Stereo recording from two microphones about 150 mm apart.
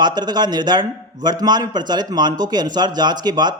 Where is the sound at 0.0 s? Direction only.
30° right (ahead or behind).